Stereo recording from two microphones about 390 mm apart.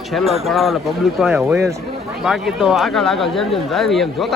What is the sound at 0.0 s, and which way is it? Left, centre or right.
Speech, centre.